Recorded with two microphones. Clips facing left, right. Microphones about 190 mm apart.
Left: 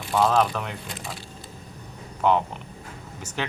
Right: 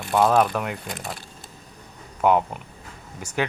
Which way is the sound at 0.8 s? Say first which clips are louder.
Right 3 dB; 55° right (ahead or behind).